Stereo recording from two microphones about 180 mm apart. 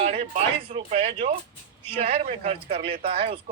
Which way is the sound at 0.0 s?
40° right (ahead or behind).